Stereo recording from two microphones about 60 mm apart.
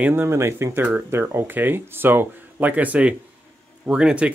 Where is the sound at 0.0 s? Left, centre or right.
Right.